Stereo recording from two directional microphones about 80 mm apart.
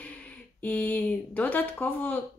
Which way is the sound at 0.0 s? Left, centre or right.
Centre.